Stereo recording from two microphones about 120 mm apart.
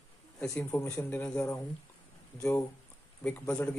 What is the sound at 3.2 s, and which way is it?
Speech, 10° left (ahead or behind).